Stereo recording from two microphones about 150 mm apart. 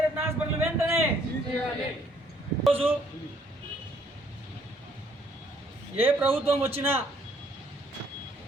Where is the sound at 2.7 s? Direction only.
40° right (ahead or behind).